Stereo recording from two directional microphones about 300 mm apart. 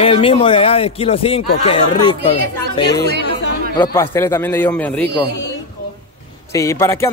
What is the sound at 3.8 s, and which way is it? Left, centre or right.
A man's voice, centre.